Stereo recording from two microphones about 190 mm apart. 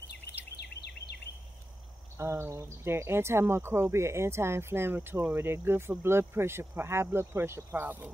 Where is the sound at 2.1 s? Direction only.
15° right (ahead or behind).